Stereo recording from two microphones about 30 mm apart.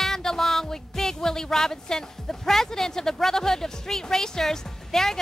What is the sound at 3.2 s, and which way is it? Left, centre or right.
Music, centre.